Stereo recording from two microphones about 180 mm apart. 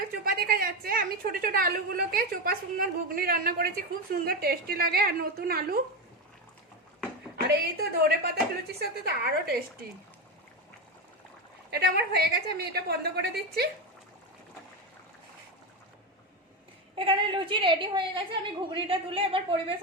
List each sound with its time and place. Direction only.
0.3 s a woman's voice: 55° right (ahead or behind)
7.4 s a woman's voice: 60° right (ahead or behind)
11.7 s a woman's voice: 65° right (ahead or behind)
16.9 s a woman's voice: 30° right (ahead or behind)